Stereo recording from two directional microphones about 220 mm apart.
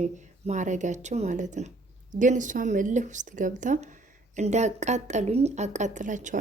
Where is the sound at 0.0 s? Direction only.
35° right (ahead or behind).